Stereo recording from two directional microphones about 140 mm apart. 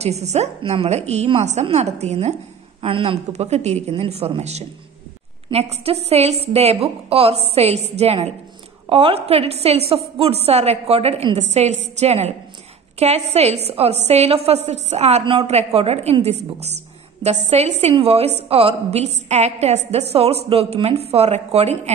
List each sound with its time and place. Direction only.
0.0 s a woman's voice: 50° right (ahead or behind)
2.8 s a woman's voice: 40° right (ahead or behind)